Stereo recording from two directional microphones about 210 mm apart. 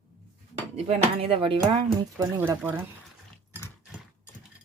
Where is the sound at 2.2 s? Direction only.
10° right (ahead or behind).